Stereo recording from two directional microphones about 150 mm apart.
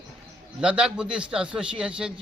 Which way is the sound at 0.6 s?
5° right (ahead or behind).